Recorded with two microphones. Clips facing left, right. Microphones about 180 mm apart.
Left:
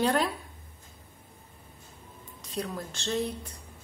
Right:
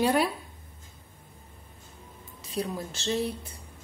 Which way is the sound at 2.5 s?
20° right (ahead or behind).